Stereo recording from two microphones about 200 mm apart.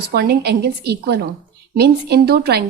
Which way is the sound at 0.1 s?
50° right (ahead or behind).